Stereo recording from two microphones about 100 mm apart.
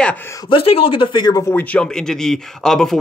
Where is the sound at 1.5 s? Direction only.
10° left (ahead or behind).